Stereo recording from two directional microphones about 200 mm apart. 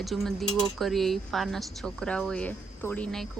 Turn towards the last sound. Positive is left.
turn(degrees=5)  # may be behind; listen again after turning